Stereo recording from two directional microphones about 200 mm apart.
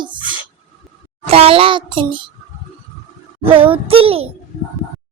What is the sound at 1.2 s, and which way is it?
Speech, 30° right (ahead or behind).